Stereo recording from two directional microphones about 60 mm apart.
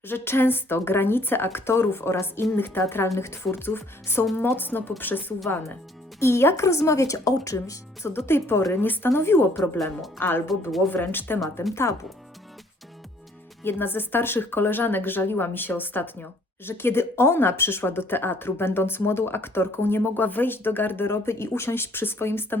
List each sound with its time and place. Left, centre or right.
0.1 s speech: left
2.6 s speech: left
6.1 s speech: left
8.1 s speech: left
11.7 s speech: left
13.7 s speech: left